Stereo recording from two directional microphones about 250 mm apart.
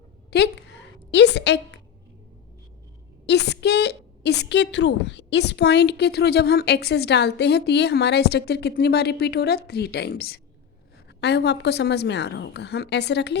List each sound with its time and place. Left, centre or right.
0.3 s a woman's voice: left
3.2 s a woman's voice: left